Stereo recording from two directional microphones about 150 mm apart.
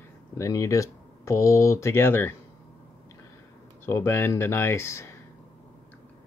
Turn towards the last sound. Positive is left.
turn(degrees=20)  # may be behind; listen again after turning